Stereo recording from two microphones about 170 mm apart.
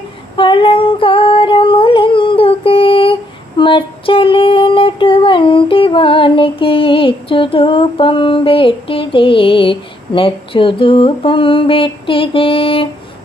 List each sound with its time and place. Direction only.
0.3 s female singing: 30° left (ahead or behind)
3.6 s child singing: 30° left (ahead or behind)